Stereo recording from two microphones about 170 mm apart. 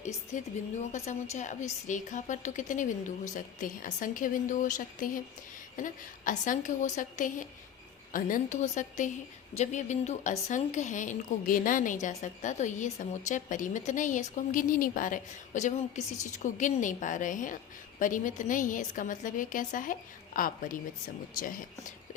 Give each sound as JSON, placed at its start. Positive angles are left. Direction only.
{"t": 0.0, "sound": "a woman's voice", "side_deg": 45}